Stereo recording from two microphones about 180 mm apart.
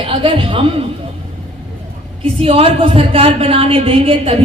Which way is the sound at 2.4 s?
35° right (ahead or behind).